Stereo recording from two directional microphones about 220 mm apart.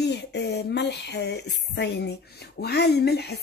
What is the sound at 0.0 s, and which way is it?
Speech, 50° left (ahead or behind).